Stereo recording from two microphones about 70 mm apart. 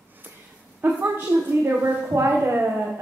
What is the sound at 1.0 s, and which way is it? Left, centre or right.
A woman's voice, right.